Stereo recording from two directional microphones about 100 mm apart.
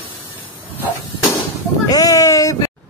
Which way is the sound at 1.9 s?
35° left (ahead or behind).